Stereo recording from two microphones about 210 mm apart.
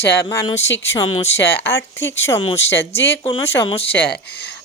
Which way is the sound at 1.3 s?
10° left (ahead or behind).